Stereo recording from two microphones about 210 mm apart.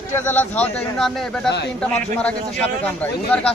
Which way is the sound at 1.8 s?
5° left (ahead or behind).